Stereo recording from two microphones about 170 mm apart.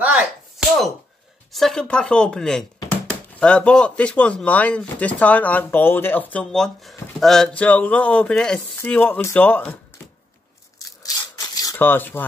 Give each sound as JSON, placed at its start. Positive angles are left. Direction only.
{"t": 0.0, "sound": "a sound", "side_deg": -10}
{"t": 1.5, "sound": "speech", "side_deg": 0}
{"t": 10.8, "sound": "tearing", "side_deg": 20}